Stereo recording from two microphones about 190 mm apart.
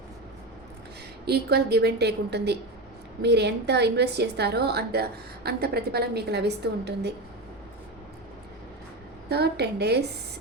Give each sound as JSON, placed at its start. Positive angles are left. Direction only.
{"t": 1.2, "sound": "a woman's voice", "side_deg": -55}
{"t": 9.3, "sound": "a woman's voice", "side_deg": -60}